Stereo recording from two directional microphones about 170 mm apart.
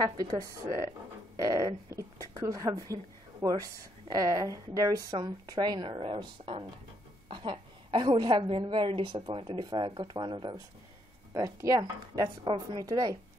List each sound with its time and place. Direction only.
0.2 s a woman's voice: 20° right (ahead or behind)